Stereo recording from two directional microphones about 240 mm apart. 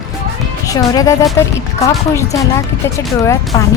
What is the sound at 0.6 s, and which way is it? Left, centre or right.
Speech, centre.